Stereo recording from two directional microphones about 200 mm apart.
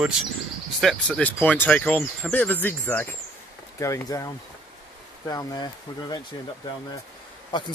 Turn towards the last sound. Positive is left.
turn(degrees=25)  # may be behind; listen again after turning